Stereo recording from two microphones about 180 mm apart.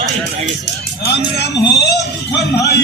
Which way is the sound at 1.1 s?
65° left (ahead or behind).